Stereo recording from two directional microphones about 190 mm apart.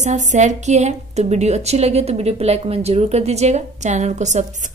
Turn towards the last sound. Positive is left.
turn(degrees=-40)  # may be behind; listen again after turning